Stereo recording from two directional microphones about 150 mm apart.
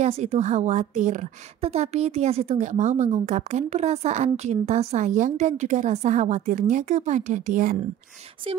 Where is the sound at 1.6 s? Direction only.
45° right (ahead or behind); by 7.8 s 65° right (ahead or behind).